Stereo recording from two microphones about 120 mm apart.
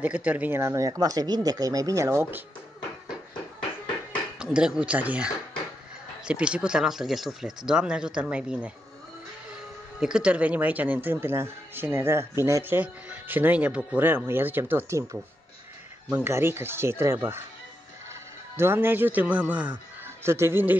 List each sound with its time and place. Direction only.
0.0 s speech: 10° right (ahead or behind)
4.4 s speech: 5° right (ahead or behind)
9.9 s speech: 5° right (ahead or behind)
16.3 s speech: 20° right (ahead or behind)
18.6 s speech: 20° right (ahead or behind)